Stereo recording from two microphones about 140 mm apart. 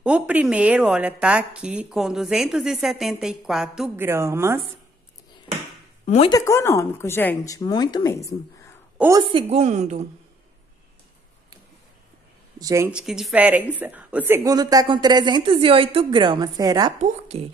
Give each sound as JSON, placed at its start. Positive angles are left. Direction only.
{"t": 0.0, "sound": "a woman's voice", "side_deg": -10}
{"t": 3.9, "sound": "a woman's voice", "side_deg": -20}
{"t": 6.0, "sound": "a woman's voice", "side_deg": 50}
{"t": 6.3, "sound": "a woman's voice", "side_deg": 20}
{"t": 9.3, "sound": "a woman's voice", "side_deg": -45}
{"t": 12.5, "sound": "speech", "side_deg": -25}
{"t": 12.9, "sound": "a woman's voice", "side_deg": -5}
{"t": 14.5, "sound": "speech", "side_deg": -25}
{"t": 17.0, "sound": "a woman's voice", "side_deg": -45}